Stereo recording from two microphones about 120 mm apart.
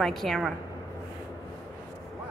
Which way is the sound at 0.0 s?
Centre (ahead or behind).